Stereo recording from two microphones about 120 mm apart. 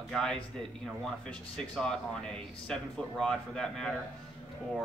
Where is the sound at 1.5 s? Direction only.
5° left (ahead or behind).